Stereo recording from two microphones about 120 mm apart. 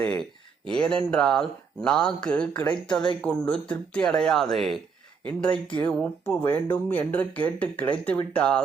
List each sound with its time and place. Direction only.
0.0 s speech: 10° left (ahead or behind)